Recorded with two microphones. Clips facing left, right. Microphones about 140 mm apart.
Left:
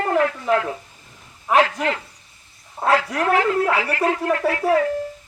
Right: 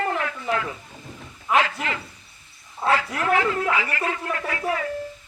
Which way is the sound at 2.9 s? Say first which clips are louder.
Left 3 dB; 40° left (ahead or behind).